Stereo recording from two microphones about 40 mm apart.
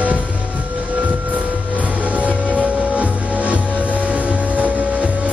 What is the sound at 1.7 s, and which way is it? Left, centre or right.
Music, right.